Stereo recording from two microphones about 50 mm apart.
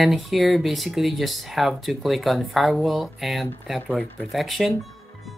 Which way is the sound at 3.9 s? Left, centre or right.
Left.